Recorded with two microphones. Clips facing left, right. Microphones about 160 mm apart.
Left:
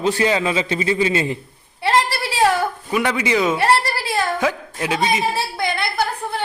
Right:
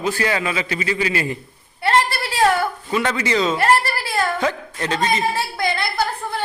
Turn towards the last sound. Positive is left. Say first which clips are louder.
# left 1 dB
turn(degrees=15)  # may be behind; listen again after turning